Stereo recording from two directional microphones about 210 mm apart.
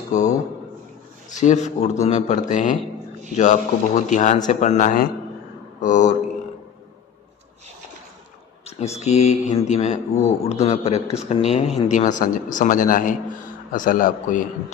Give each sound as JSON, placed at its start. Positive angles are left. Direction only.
{"t": 0.1, "sound": "speech", "side_deg": 35}
{"t": 9.0, "sound": "speech", "side_deg": 30}